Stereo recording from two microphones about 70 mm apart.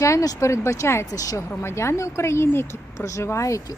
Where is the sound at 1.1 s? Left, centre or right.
Left.